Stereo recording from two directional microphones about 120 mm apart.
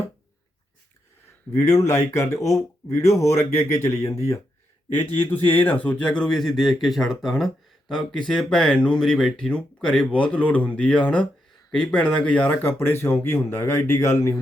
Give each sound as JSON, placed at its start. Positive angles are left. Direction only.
{"t": 1.5, "sound": "speech", "side_deg": 30}